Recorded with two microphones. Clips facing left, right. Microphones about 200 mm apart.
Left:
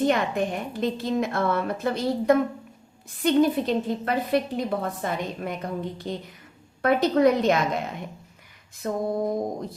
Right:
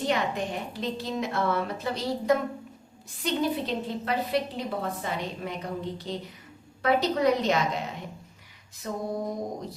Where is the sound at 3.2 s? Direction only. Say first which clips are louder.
Left 7 dB; 50° left (ahead or behind).